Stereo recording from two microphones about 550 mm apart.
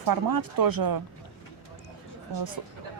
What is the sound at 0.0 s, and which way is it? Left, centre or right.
Speech, right.